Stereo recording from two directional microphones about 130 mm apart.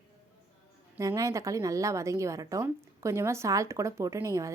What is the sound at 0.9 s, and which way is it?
Speech, 25° right (ahead or behind).